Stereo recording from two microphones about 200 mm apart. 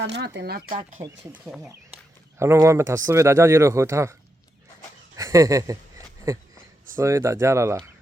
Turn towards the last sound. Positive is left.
turn(degrees=-15)  # may be behind; listen again after turning